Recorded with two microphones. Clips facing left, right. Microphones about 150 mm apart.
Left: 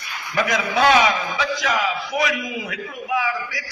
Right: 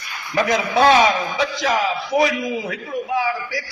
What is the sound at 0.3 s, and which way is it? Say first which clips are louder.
A man's voice: right 3 dB; 30° right (ahead or behind).